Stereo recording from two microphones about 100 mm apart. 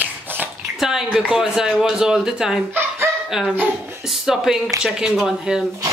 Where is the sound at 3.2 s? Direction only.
5° right (ahead or behind).